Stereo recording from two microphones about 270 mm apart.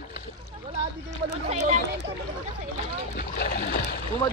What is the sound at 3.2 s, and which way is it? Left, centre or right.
Boat, left.